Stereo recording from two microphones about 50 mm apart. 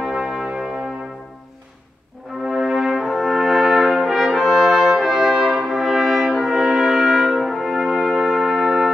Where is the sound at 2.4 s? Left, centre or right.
Centre.